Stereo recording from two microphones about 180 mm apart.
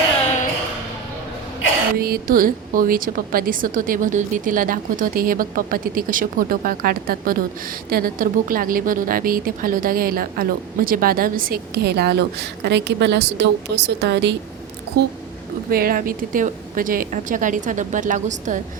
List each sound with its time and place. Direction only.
2.0 s a woman's voice: 55° right (ahead or behind); by 14.3 s 70° right (ahead or behind)
15.7 s a woman's voice: 55° right (ahead or behind)